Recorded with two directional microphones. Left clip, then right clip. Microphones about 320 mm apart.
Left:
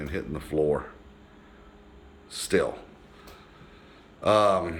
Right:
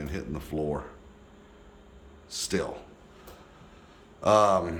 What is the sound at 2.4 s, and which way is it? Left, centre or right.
Speech, centre.